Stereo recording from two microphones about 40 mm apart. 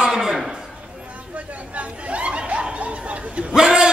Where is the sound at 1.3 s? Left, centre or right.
Right.